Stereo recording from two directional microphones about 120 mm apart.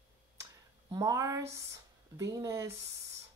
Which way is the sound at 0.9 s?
25° right (ahead or behind).